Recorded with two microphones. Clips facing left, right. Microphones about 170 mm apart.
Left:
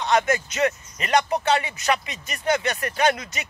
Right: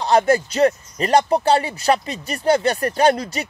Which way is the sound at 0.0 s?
35° right (ahead or behind).